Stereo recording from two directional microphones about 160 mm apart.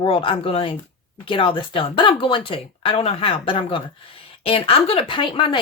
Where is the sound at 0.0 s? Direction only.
35° left (ahead or behind).